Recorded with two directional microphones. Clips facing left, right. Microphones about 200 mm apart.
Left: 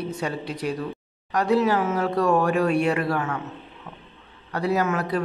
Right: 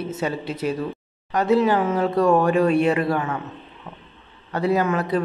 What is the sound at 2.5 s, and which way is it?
Speech, centre (ahead or behind).